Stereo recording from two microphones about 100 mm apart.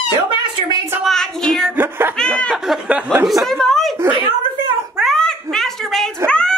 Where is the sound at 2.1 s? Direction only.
10° left (ahead or behind).